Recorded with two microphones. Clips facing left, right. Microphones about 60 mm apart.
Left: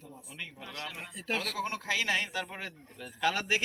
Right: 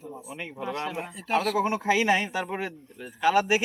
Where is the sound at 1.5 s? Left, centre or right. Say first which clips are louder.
Right 9 dB; centre.